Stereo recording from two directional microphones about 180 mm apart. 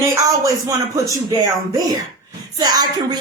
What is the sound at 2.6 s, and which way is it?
Speech, 20° right (ahead or behind).